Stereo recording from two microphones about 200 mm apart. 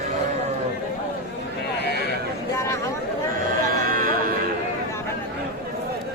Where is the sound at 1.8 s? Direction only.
55° left (ahead or behind).